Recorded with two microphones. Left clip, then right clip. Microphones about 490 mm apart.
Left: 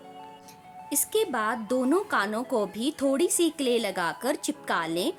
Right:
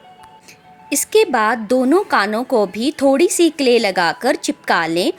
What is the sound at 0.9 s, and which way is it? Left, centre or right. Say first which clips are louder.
A woman's voice: right 12 dB; left.